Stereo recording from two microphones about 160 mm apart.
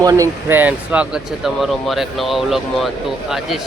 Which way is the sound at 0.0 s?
20° right (ahead or behind).